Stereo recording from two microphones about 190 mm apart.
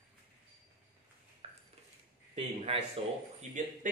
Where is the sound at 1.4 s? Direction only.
30° right (ahead or behind).